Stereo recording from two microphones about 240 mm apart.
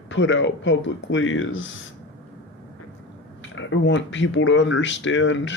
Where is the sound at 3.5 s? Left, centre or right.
Left.